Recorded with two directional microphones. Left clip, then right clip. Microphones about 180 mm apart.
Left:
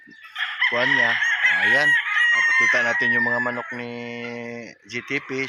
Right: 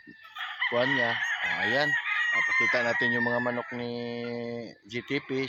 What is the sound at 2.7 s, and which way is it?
Fowl, 25° left (ahead or behind).